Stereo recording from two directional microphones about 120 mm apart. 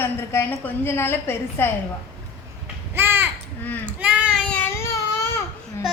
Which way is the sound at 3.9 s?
10° right (ahead or behind).